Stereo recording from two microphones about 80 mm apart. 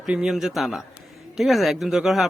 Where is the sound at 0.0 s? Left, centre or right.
Centre.